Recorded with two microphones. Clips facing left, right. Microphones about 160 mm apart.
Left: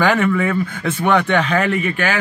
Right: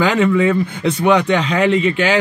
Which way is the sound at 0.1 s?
20° right (ahead or behind).